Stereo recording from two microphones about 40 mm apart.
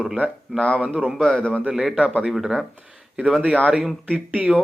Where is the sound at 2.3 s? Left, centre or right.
Centre.